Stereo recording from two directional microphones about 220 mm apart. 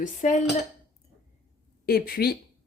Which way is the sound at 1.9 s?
45° left (ahead or behind).